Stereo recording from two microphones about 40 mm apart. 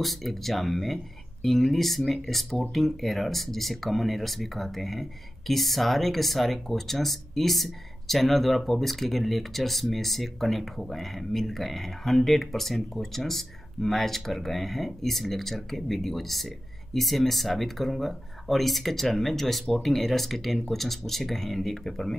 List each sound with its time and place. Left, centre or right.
0.0 s speech: centre